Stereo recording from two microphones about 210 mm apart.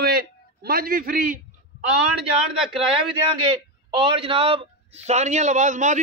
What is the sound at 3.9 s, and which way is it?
A man's voice, 25° right (ahead or behind).